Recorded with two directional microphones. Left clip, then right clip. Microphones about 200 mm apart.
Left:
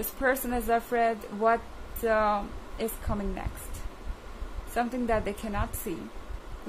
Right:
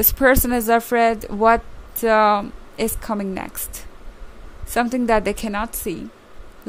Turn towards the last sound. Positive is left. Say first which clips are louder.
# right 9 dB
turn(degrees=-50)  # may be behind; listen again after turning